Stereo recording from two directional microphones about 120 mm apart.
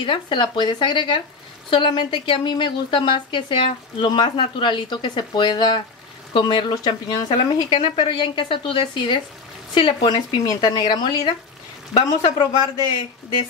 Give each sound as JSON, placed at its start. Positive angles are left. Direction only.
{"t": 0.0, "sound": "speech", "side_deg": 40}